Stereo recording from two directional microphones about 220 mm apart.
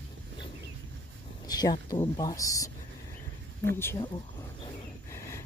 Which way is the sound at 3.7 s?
10° left (ahead or behind).